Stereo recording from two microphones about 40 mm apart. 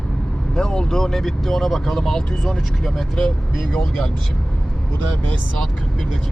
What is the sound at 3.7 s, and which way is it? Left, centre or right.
Speech, left.